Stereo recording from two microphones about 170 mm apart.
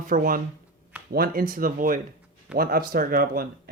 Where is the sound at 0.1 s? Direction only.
55° right (ahead or behind).